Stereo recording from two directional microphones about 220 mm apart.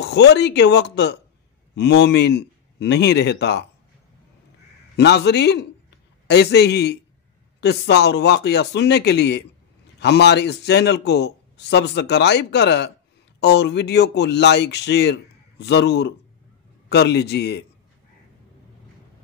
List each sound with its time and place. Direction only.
0.0 s a man's voice: 50° left (ahead or behind)
4.9 s a man's voice: 50° left (ahead or behind)